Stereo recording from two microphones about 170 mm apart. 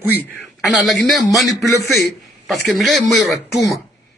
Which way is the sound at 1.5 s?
15° left (ahead or behind).